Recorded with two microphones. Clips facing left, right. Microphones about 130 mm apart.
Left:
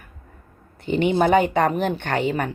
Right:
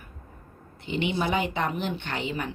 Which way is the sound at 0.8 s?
45° left (ahead or behind).